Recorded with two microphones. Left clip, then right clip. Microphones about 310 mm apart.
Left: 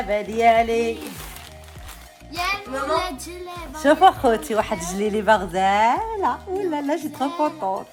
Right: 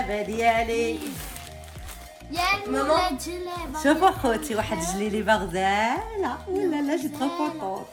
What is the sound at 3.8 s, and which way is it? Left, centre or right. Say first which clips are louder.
A woman's voice: left 6 dB; left.